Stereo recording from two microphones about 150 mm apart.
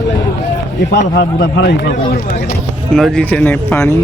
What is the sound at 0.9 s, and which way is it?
Speech, 90° left.